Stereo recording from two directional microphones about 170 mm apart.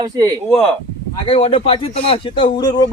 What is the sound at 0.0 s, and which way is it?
Speech, 25° right (ahead or behind).